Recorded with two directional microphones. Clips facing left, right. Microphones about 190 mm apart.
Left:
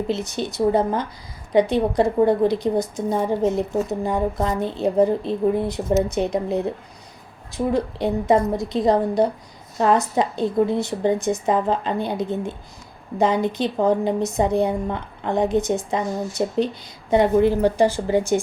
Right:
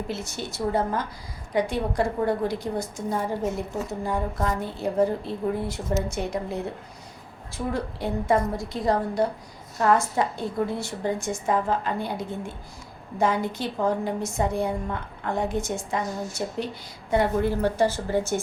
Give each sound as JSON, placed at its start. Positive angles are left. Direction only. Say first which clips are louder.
{"t": 0.1, "sound": "a woman's voice", "louder": "left 7 dB", "side_deg": 20}